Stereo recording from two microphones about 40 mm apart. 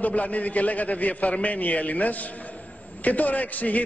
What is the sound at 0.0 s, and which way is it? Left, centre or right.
A man's voice, left.